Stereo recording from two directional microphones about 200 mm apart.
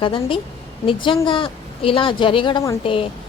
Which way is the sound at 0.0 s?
25° left (ahead or behind).